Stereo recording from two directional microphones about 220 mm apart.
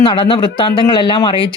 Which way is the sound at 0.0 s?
20° left (ahead or behind).